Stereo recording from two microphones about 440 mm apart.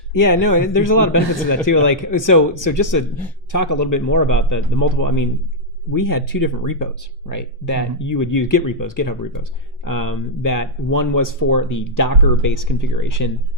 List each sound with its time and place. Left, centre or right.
0.1 s speech: left